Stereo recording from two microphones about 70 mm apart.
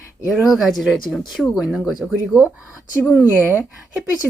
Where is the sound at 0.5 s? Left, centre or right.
Centre.